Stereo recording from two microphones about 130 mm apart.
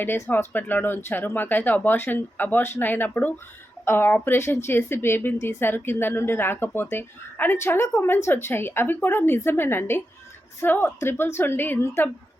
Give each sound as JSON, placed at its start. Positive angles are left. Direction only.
{"t": 0.0, "sound": "speech", "side_deg": 15}